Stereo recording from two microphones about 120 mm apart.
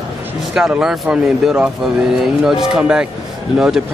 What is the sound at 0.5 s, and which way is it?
Speech, 5° right (ahead or behind).